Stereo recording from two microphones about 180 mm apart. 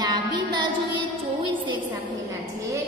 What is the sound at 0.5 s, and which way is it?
Music, 25° right (ahead or behind).